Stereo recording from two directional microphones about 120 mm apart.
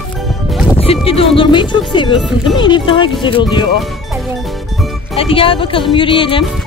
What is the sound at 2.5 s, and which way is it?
Speech, 40° left (ahead or behind).